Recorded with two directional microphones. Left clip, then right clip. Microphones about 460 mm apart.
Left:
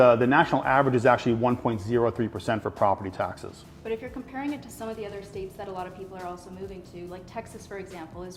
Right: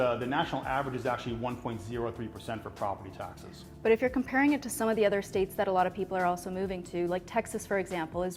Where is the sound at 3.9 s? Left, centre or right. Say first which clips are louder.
Right 7 dB; right.